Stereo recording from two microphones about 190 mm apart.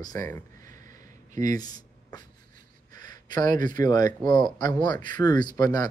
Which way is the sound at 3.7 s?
20° left (ahead or behind).